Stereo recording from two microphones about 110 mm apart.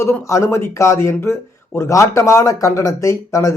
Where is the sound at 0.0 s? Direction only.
25° left (ahead or behind).